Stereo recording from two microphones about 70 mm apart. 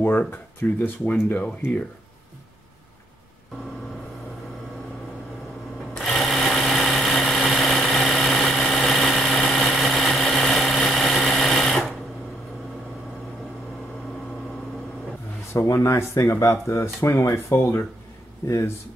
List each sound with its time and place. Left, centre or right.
0.0 s speech: left
5.9 s sewing machine: centre
7.9 s engine: centre
15.5 s speech: left